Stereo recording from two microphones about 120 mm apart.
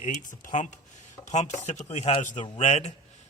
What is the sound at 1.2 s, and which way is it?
Speech, 75° left (ahead or behind).